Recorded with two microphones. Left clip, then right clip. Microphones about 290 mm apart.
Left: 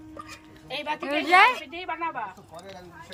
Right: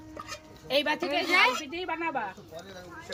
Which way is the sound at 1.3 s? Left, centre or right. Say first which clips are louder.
Left 6 dB; centre.